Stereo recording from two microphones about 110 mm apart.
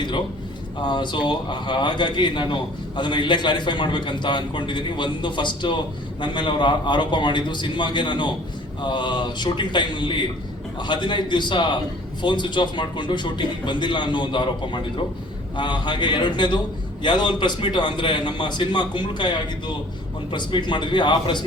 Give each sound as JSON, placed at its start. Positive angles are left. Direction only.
{"t": 0.9, "sound": "a man's voice", "side_deg": 45}